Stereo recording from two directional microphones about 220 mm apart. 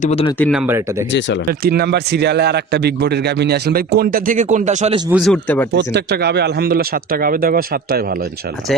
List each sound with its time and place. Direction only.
0.0 s speech: 30° left (ahead or behind)
0.5 s speech: 5° right (ahead or behind)
1.5 s a man's voice: 45° right (ahead or behind)
5.1 s speech: centre (ahead or behind)
5.7 s a man's voice: 50° right (ahead or behind)